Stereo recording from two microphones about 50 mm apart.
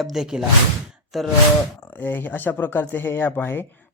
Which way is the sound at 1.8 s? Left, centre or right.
Left.